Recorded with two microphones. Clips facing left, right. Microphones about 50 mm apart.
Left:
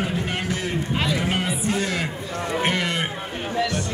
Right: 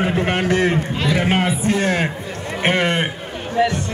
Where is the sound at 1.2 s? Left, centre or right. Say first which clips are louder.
Right 6 dB; right.